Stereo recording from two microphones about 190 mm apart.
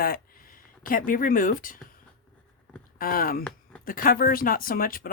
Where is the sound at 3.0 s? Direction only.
50° left (ahead or behind).